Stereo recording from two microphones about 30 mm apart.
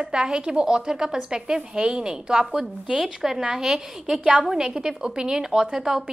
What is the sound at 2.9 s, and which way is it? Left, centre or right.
A woman's voice, centre.